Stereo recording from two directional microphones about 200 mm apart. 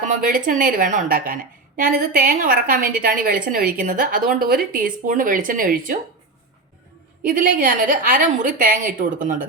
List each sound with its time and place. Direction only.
0.1 s a woman's voice: 45° right (ahead or behind)
7.2 s a woman's voice: 45° right (ahead or behind)